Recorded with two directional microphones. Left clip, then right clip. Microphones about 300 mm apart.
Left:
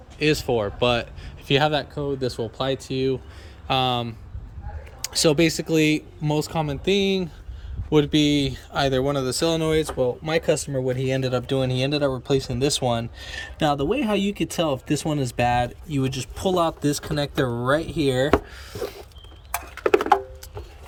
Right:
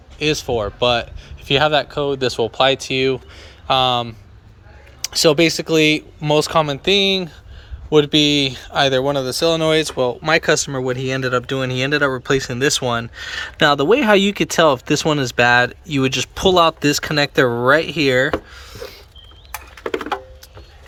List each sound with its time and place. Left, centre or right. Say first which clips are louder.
0.2 s speech: right 3 dB; centre
13.6 s speech: right 9 dB; right
14.2 s speech: right 10 dB; centre
17.4 s speech: right 8 dB; right
17.7 s speech: right 7 dB; centre